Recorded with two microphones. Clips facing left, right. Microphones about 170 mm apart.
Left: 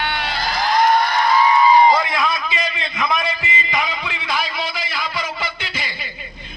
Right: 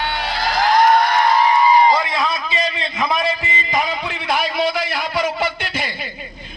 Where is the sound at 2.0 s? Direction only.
30° right (ahead or behind); by 5.9 s 55° right (ahead or behind).